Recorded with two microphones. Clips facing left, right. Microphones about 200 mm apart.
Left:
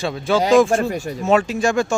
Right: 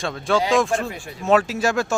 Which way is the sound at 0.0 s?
Centre (ahead or behind).